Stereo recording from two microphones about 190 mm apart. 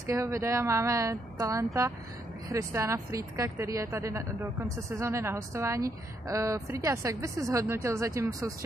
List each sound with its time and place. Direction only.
0.0 s a woman's voice: 15° right (ahead or behind)